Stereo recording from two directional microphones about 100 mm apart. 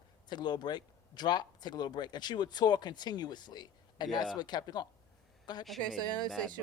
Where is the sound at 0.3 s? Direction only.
45° left (ahead or behind).